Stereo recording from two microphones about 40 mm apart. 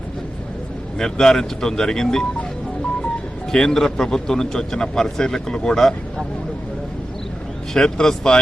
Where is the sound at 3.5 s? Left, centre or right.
Centre.